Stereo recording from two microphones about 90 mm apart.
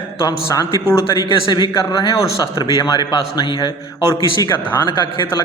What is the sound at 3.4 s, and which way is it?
Speech, 65° left (ahead or behind).